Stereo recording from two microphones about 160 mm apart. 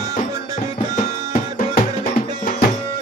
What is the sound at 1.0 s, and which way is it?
Music, 55° left (ahead or behind).